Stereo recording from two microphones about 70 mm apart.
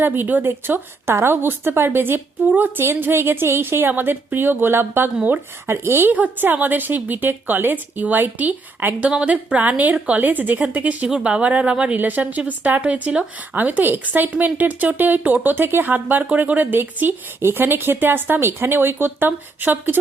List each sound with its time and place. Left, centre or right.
0.0 s a woman's voice: right